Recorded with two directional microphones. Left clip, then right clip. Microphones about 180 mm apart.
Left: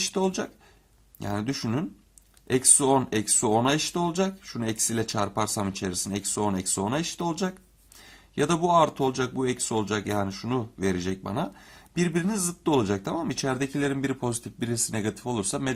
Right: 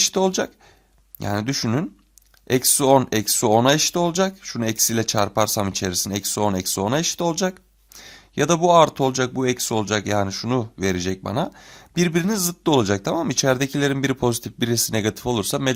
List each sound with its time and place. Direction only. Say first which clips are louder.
0.0 s speech: right 7 dB; 35° right (ahead or behind)